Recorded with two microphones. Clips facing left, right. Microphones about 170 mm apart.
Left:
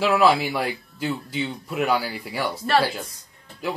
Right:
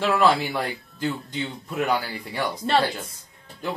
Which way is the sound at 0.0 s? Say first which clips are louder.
Left 2 dB; 5° left (ahead or behind).